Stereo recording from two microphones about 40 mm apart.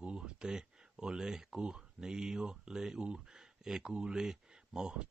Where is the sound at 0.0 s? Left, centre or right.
Right.